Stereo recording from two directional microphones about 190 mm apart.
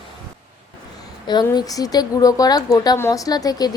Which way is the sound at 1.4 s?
20° left (ahead or behind).